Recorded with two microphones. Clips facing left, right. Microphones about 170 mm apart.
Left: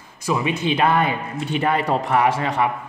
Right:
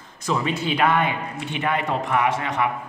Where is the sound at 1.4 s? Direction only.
35° left (ahead or behind).